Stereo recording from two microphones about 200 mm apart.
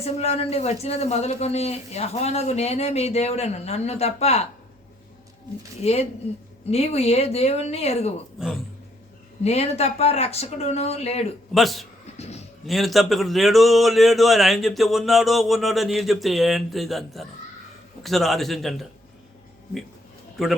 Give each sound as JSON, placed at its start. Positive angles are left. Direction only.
{"t": 0.0, "sound": "a man's voice", "side_deg": 30}
{"t": 5.8, "sound": "a man's voice", "side_deg": 30}
{"t": 9.4, "sound": "a man's voice", "side_deg": 30}
{"t": 11.5, "sound": "a man's voice", "side_deg": 0}
{"t": 12.1, "sound": "a sound", "side_deg": 30}
{"t": 12.6, "sound": "a man's voice", "side_deg": 0}